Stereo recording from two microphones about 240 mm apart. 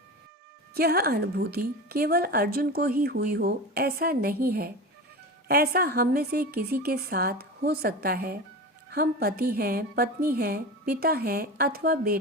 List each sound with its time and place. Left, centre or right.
0.7 s a woman's voice: right